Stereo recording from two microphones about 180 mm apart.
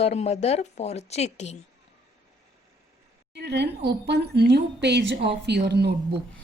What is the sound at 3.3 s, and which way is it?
Speech, 70° right (ahead or behind).